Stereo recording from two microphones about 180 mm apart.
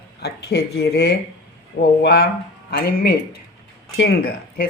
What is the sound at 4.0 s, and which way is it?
Speech, 55° left (ahead or behind).